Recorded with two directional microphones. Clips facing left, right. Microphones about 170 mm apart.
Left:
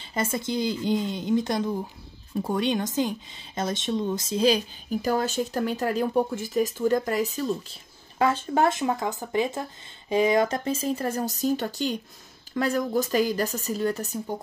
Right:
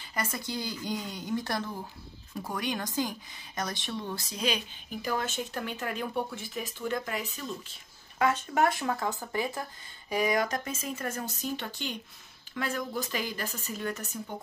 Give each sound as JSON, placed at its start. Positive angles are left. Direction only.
{"t": 0.0, "sound": "speech", "side_deg": 25}